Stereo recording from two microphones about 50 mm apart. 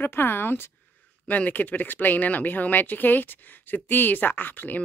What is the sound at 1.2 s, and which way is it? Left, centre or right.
Speech, left.